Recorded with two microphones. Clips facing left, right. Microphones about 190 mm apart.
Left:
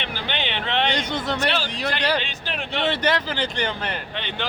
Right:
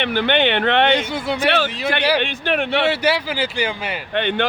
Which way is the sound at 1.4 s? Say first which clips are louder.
Right 5 dB; 60° right (ahead or behind).